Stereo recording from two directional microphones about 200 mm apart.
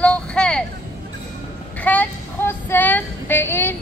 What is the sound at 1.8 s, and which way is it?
Female singing, 10° left (ahead or behind).